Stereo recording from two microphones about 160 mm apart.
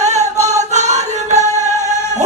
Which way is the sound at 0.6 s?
45° right (ahead or behind).